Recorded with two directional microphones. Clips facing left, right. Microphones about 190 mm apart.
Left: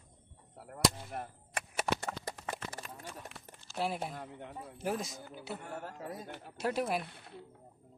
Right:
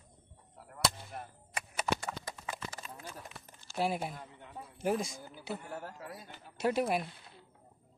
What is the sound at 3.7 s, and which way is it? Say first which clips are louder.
Speech: right 2 dB; 5° right (ahead or behind).